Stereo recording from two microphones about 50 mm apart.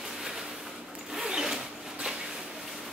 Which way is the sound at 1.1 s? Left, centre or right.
Centre.